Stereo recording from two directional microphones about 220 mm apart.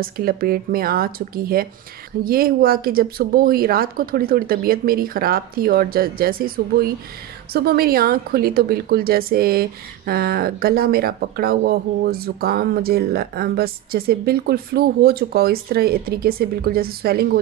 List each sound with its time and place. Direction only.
0.0 s a woman's voice: 40° right (ahead or behind)